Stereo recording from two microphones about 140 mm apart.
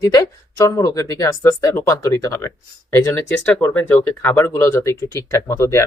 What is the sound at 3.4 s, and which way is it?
Speech, 10° left (ahead or behind).